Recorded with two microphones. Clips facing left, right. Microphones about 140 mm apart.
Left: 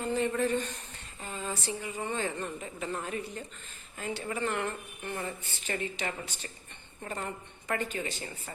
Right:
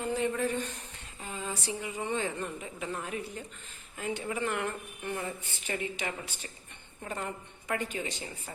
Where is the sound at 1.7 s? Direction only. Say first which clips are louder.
Right 3 dB; 15° right (ahead or behind).